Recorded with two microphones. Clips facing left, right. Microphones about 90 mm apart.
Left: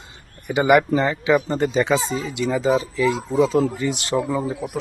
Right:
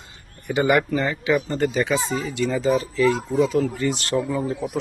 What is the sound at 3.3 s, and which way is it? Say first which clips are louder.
Speech: left 2 dB; 30° left (ahead or behind).